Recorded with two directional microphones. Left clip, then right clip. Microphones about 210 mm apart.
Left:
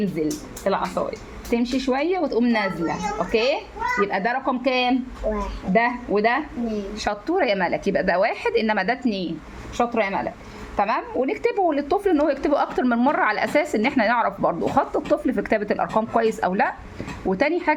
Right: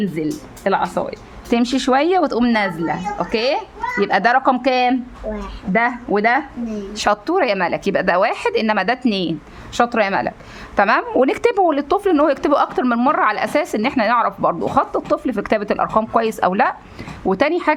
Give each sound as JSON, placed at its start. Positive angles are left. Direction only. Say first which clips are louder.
{"t": 0.2, "sound": "a woman's voice", "louder": "right 3 dB", "side_deg": -35}
{"t": 7.3, "sound": "a woman's voice", "louder": "right 4 dB", "side_deg": -20}
{"t": 9.7, "sound": "a woman's voice", "louder": "right 6 dB", "side_deg": -50}